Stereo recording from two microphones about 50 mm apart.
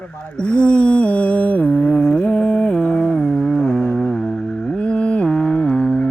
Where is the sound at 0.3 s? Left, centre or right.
Left.